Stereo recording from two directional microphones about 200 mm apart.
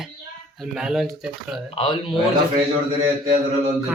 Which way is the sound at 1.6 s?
30° left (ahead or behind).